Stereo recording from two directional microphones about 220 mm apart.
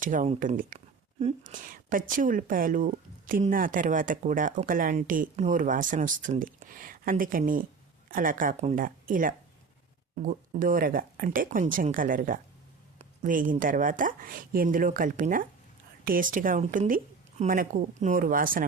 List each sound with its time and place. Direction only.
0.0 s a woman's voice: 35° right (ahead or behind)